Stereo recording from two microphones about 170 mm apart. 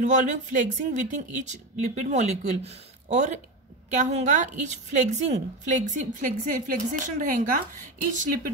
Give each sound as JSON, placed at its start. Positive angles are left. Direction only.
{"t": 0.0, "sound": "a woman's voice", "side_deg": -45}